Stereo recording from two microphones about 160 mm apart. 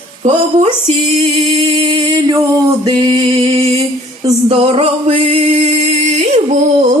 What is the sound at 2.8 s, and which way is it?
Music, 30° right (ahead or behind).